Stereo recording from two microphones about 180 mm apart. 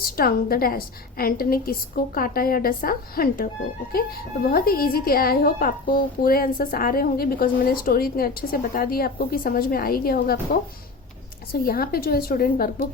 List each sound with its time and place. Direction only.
0.0 s a woman's voice: 55° left (ahead or behind)
11.6 s a woman's voice: 55° left (ahead or behind)